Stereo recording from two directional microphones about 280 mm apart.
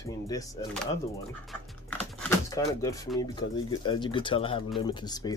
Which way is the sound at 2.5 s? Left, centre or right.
Centre.